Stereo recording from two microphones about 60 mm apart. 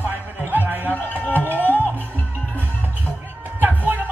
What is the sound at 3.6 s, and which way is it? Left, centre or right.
Music, right.